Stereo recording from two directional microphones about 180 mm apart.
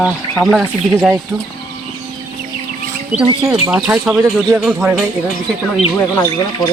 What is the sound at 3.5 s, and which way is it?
Speech, 10° right (ahead or behind).